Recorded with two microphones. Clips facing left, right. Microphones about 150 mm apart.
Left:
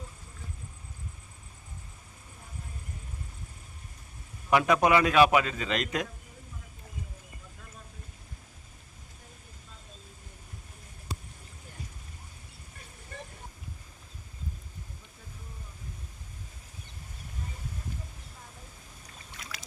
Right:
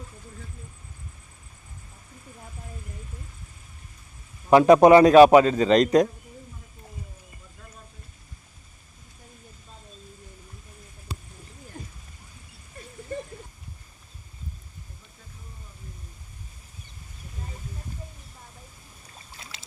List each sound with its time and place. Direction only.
4.4 s a man's voice: 35° right (ahead or behind)
19.3 s boat: 25° right (ahead or behind)